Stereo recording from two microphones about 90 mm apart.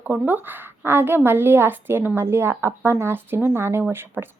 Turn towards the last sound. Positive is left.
turn(degrees=-25)  # may be behind; listen again after turning